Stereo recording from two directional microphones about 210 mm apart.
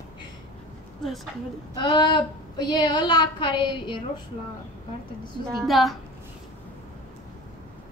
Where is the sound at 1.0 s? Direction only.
Centre (ahead or behind).